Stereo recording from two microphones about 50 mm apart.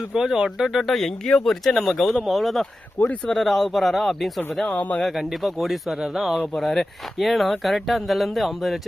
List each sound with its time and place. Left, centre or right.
0.1 s speech: centre
4.7 s speech: left
5.0 s speech: centre
6.6 s speech: centre